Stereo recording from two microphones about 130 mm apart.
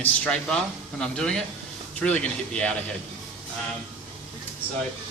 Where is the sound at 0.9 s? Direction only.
5° left (ahead or behind).